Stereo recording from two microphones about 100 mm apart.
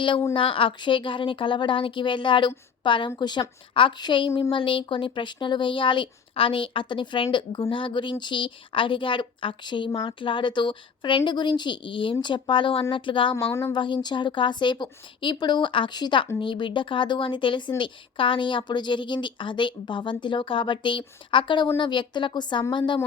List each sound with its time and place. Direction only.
0.3 s speech: 60° left (ahead or behind)
13.3 s a woman's voice: 25° left (ahead or behind)
13.7 s speech: 50° left (ahead or behind)